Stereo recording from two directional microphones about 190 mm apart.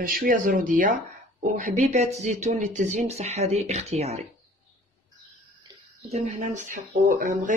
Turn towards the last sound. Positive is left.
turn(degrees=-45)  # may be behind; listen again after turning